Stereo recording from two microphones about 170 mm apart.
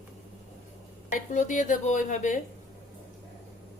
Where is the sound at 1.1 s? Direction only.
50° left (ahead or behind).